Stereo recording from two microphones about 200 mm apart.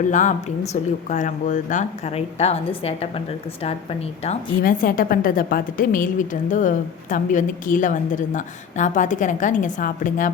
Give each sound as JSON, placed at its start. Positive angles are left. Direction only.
{"t": 0.1, "sound": "a woman's voice", "side_deg": 40}